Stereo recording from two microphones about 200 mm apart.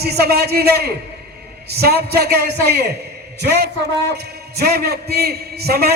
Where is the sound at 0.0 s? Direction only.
55° right (ahead or behind).